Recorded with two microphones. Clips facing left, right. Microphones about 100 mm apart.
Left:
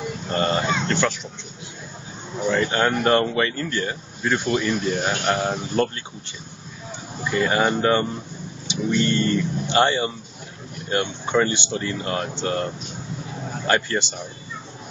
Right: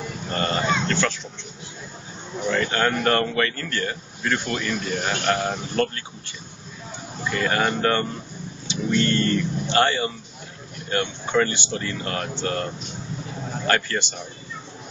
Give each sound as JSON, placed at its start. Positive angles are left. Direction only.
{"t": 0.4, "sound": "a sound", "side_deg": 20}
{"t": 2.5, "sound": "speech", "side_deg": 15}
{"t": 7.2, "sound": "speech", "side_deg": 15}
{"t": 13.7, "sound": "speech", "side_deg": 20}